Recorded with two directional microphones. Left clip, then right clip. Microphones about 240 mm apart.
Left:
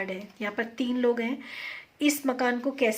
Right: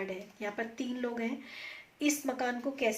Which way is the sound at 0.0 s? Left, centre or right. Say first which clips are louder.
Left 5 dB; left.